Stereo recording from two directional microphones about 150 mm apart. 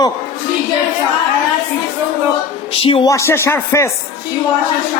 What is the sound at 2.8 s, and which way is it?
Speech, 35° left (ahead or behind).